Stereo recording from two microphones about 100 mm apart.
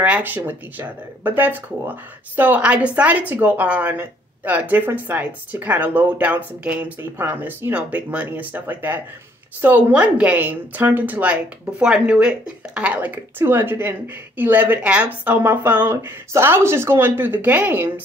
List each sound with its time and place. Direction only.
0.0 s speech: 15° right (ahead or behind)